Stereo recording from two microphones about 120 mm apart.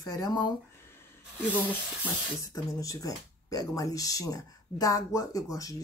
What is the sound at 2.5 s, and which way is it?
Speech, 30° left (ahead or behind).